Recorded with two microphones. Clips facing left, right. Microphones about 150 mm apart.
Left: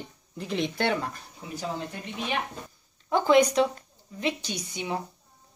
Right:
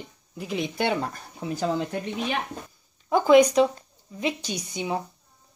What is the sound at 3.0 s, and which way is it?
Speech, 15° right (ahead or behind).